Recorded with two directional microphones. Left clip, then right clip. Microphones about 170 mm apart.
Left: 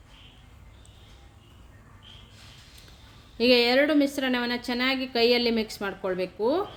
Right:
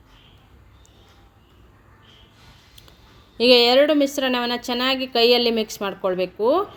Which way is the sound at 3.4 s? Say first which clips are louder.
Right 6 dB; 5° right (ahead or behind).